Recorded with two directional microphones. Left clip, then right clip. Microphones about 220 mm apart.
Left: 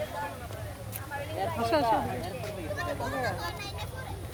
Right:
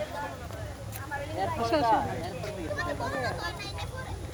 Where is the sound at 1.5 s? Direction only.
50° left (ahead or behind).